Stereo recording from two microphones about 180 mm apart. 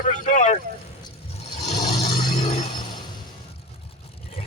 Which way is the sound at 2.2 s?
35° left (ahead or behind).